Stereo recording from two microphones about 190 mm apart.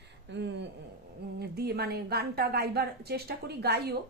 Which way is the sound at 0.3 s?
65° right (ahead or behind).